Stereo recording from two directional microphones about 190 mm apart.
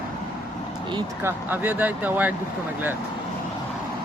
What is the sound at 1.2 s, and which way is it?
Speech, 10° right (ahead or behind).